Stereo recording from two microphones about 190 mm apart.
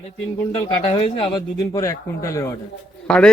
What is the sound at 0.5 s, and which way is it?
A man's voice, 15° left (ahead or behind).